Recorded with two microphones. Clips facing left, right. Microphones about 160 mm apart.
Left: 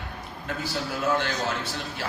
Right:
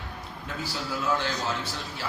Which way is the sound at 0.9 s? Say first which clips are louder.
Left 2 dB; 60° left (ahead or behind).